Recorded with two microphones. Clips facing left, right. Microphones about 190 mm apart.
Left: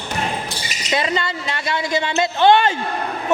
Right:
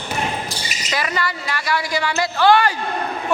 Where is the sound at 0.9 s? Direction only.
25° left (ahead or behind).